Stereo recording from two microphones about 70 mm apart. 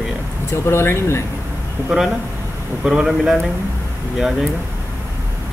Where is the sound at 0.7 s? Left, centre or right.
Left.